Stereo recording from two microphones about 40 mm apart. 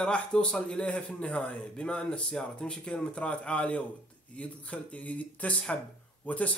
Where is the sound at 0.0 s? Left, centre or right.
Left.